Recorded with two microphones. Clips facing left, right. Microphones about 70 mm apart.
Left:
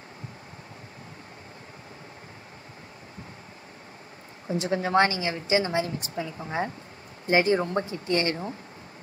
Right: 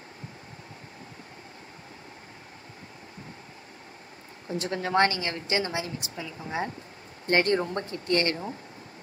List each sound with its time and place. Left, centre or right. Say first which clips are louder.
4.5 s a woman's voice: left 3 dB; centre
5.7 s a woman's voice: left 5 dB; left
6.3 s a woman's voice: even; left
7.2 s speech: left 2 dB; centre
8.1 s a woman's voice: even; left